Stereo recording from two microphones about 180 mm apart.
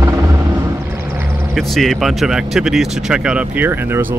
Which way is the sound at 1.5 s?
Centre (ahead or behind).